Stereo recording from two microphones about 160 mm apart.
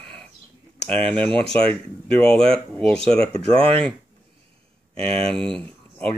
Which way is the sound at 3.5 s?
35° right (ahead or behind).